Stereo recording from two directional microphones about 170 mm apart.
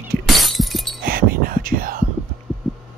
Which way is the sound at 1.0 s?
60° right (ahead or behind).